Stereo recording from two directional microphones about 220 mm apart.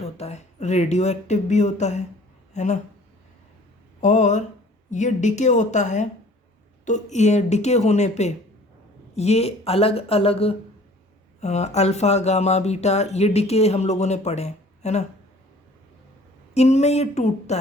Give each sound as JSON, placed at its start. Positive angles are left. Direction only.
{"t": 0.0, "sound": "speech", "side_deg": 30}
{"t": 4.0, "sound": "speech", "side_deg": 30}
{"t": 16.6, "sound": "speech", "side_deg": 30}